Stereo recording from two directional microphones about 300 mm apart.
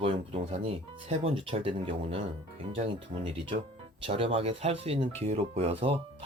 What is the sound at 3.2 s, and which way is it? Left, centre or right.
Speech, centre.